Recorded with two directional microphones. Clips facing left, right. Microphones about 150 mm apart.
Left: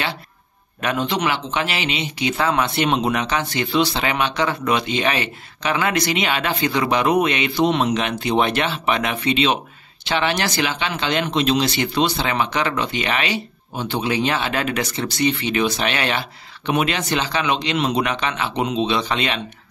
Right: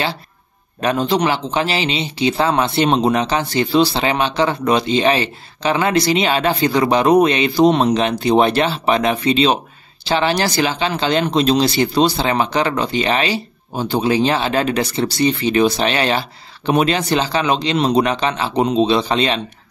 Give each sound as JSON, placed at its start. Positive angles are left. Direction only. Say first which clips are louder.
{"t": 0.7, "sound": "speech", "louder": "right 5 dB", "side_deg": -35}